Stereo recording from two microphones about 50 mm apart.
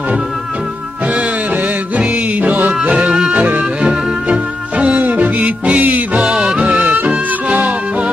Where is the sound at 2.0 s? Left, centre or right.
Right.